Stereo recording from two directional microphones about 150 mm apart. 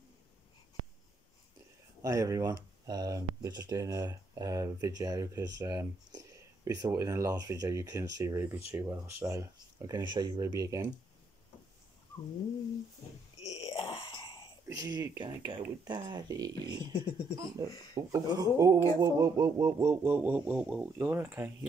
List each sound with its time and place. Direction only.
2.0 s speech: 20° right (ahead or behind)
13.7 s groan: 35° left (ahead or behind)
14.7 s speech: 25° right (ahead or behind)
18.9 s a sound: 25° right (ahead or behind)